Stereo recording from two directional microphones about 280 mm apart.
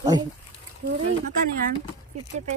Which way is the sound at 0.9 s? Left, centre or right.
Right.